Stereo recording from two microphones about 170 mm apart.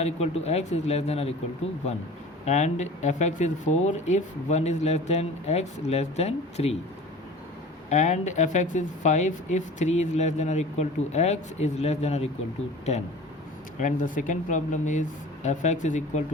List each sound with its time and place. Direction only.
0.0 s speech: 40° left (ahead or behind)
2.4 s speech: 40° left (ahead or behind)
7.9 s speech: 45° left (ahead or behind)